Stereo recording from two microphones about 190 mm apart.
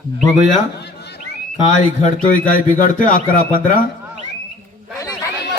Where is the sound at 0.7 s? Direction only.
60° left (ahead or behind).